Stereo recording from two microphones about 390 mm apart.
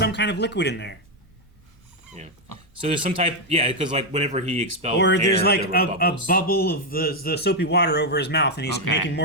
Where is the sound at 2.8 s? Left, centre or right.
Centre.